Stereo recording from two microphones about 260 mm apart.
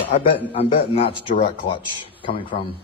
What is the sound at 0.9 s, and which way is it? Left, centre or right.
Speech, left.